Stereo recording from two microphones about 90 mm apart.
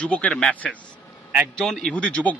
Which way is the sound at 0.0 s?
15° left (ahead or behind).